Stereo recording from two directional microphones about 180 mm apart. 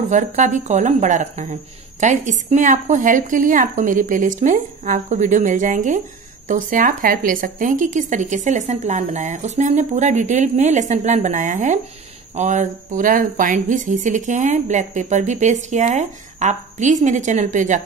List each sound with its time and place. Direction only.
0.1 s speech: 45° right (ahead or behind)